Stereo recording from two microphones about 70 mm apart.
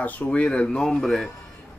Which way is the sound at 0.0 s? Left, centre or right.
Left.